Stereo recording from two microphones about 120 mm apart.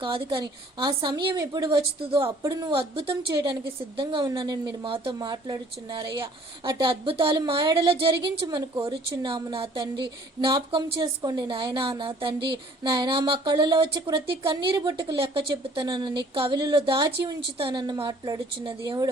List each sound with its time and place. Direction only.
0.0 s a woman's voice: 40° right (ahead or behind)
2.4 s a woman's voice: 35° right (ahead or behind)
2.7 s a woman's voice: 45° right (ahead or behind)
8.4 s a woman's voice: 35° right (ahead or behind)